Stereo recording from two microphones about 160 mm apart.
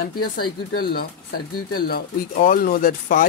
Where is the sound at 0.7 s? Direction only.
70° left (ahead or behind).